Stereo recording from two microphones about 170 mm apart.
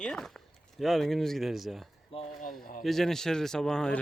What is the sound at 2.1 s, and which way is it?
Speech, 35° left (ahead or behind).